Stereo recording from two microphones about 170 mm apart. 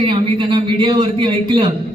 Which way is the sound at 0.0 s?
30° right (ahead or behind).